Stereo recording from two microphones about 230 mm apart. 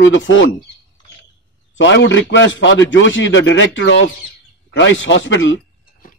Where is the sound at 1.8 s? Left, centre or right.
Left.